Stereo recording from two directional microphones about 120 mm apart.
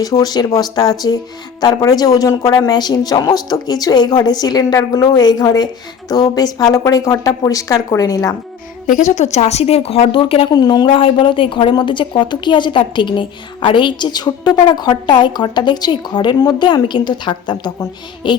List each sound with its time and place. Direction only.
0.0 s a woman's voice: 30° left (ahead or behind)
8.9 s a woman's voice: 90° left; by 10.5 s 50° left (ahead or behind)
10.5 s a woman's voice: 35° left (ahead or behind)